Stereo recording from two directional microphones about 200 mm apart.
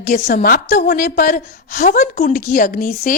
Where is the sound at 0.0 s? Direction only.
45° left (ahead or behind).